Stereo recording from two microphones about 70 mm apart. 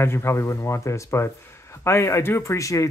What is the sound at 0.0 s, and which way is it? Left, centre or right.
Speech, left.